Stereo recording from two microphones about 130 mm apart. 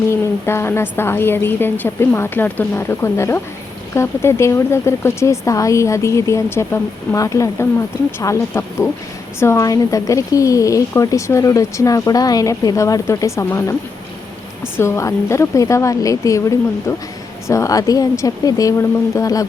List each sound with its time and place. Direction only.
0.1 s a woman's voice: 20° left (ahead or behind)
14.8 s a woman's voice: 20° left (ahead or behind)